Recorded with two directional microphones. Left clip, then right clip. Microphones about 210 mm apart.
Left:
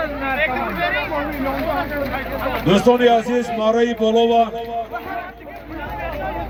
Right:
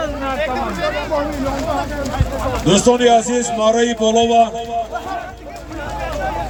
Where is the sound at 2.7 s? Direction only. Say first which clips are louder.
Right 2 dB; 40° left (ahead or behind).